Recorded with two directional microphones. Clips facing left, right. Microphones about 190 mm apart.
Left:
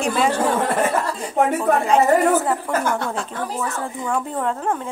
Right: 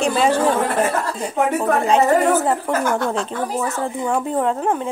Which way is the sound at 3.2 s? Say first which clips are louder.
Right 3 dB; 20° right (ahead or behind).